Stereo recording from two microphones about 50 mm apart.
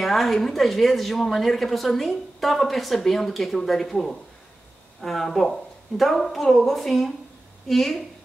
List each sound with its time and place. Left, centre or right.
0.0 s a woman's voice: centre